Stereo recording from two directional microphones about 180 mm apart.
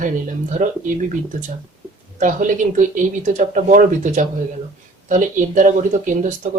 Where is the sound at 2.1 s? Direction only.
45° right (ahead or behind).